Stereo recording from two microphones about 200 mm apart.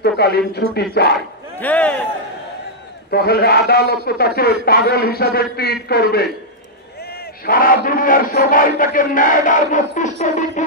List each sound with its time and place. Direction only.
0.0 s a man's voice: 55° left (ahead or behind)
1.6 s speech: 5° left (ahead or behind)
3.1 s a man's voice: 50° left (ahead or behind)
7.4 s a man's voice: 45° left (ahead or behind)
10.2 s a sound: 35° left (ahead or behind)